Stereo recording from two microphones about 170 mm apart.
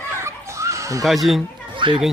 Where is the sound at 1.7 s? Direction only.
30° right (ahead or behind).